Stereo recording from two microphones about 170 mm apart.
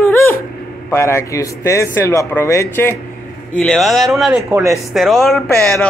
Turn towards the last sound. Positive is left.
turn(degrees=10)  # may be behind; listen again after turning